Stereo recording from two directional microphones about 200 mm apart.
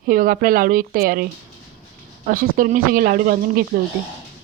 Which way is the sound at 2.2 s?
45° right (ahead or behind).